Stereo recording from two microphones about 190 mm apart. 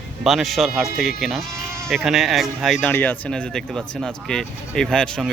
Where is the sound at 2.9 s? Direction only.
10° left (ahead or behind).